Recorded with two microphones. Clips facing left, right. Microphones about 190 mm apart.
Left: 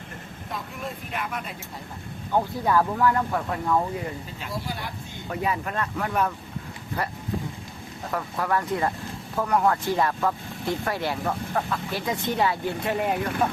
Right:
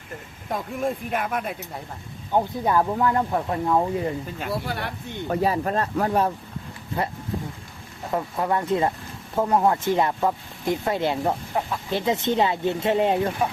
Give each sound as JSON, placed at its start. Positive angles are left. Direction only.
{"t": 0.5, "sound": "speech", "side_deg": -45}
{"t": 2.3, "sound": "speech", "side_deg": -20}
{"t": 4.4, "sound": "speech", "side_deg": -60}
{"t": 5.3, "sound": "speech", "side_deg": -35}